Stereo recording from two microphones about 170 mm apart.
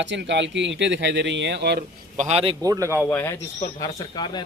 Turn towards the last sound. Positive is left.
turn(degrees=25)  # may be behind; listen again after turning